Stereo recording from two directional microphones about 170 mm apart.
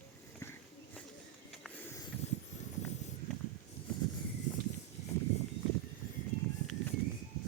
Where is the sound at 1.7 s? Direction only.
10° left (ahead or behind).